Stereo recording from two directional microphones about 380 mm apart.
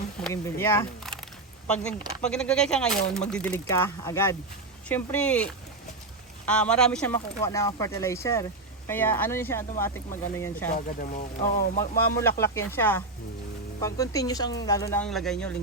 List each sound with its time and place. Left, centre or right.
0.2 s speech: centre
10.8 s speech: left
11.8 s speech: centre